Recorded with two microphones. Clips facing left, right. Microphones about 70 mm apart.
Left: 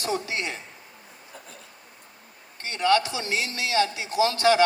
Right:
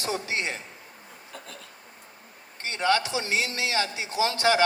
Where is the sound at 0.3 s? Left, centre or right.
Right.